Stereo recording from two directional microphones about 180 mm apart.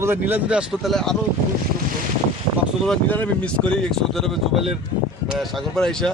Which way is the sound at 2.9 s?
10° left (ahead or behind).